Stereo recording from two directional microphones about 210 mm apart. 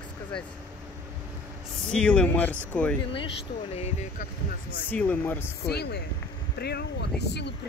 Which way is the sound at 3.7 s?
30° left (ahead or behind).